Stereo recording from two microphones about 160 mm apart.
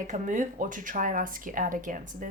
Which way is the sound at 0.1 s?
50° right (ahead or behind).